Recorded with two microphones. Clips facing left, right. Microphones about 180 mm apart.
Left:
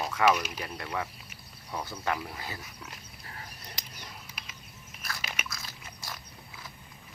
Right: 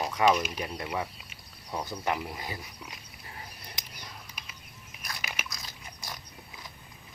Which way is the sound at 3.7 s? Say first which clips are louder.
Even; 10° right (ahead or behind).